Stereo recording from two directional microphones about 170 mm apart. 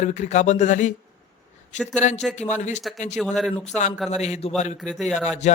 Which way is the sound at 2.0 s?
45° left (ahead or behind).